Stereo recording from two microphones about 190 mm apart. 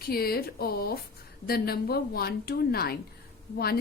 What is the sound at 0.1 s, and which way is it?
A woman's voice, 55° left (ahead or behind).